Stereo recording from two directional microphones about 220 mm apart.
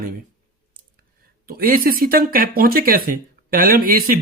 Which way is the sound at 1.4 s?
40° right (ahead or behind).